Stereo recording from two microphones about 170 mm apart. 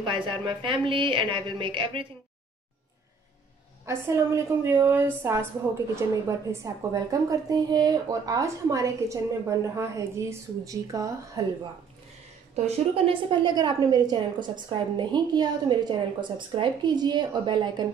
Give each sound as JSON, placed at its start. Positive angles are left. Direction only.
{"t": 0.0, "sound": "a woman's voice", "side_deg": -30}
{"t": 3.8, "sound": "a woman's voice", "side_deg": -15}
{"t": 12.6, "sound": "a woman's voice", "side_deg": -35}